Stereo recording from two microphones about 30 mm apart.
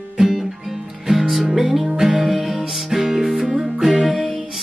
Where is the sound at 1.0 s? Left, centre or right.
Centre.